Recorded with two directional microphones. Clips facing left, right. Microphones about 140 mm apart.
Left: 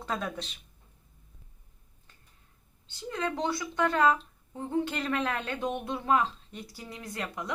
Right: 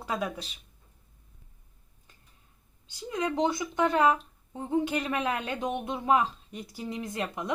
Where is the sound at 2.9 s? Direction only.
10° right (ahead or behind).